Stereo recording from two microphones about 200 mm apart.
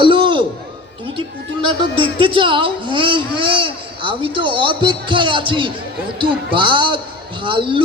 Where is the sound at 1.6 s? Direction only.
25° right (ahead or behind).